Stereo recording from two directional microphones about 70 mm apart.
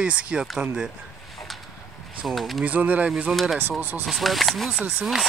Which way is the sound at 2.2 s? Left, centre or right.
Centre.